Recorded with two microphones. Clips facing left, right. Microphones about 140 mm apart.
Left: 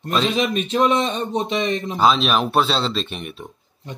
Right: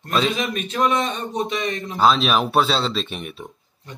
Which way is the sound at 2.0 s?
Centre (ahead or behind).